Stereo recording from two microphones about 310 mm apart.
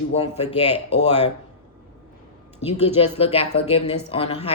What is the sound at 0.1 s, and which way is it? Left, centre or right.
Speech, centre.